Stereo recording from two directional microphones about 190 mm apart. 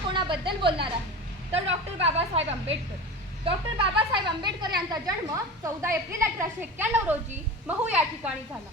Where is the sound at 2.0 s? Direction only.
35° right (ahead or behind); by 8.3 s 5° right (ahead or behind).